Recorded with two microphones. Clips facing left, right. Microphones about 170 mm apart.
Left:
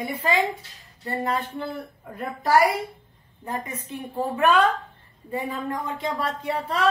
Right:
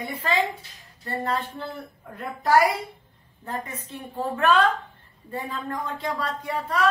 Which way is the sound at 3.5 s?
15° left (ahead or behind).